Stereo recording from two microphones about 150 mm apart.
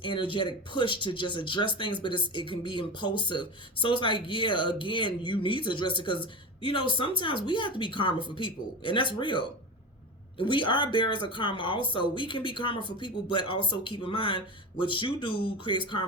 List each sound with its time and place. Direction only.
0.0 s speech: 35° left (ahead or behind)